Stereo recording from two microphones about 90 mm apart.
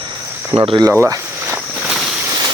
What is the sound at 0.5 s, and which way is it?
Speech, 80° right.